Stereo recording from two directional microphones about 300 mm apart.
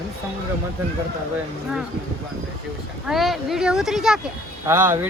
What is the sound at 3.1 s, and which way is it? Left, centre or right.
A man's voice, centre.